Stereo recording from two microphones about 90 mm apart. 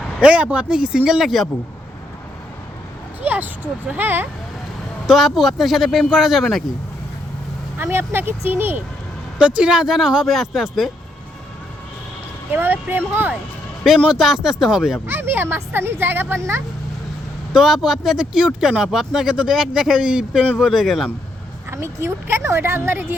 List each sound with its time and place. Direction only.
0.2 s speech: 10° right (ahead or behind)
3.2 s speech: 20° right (ahead or behind)
5.0 s speech: centre (ahead or behind)
7.8 s a woman's voice: 25° right (ahead or behind)
9.6 s speech: 10° right (ahead or behind)
12.5 s a woman's voice: 20° right (ahead or behind)
14.0 s speech: 5° right (ahead or behind)
15.0 s a woman's voice: 25° right (ahead or behind)
17.5 s speech: 5° right (ahead or behind)
21.7 s a woman's voice: 30° right (ahead or behind)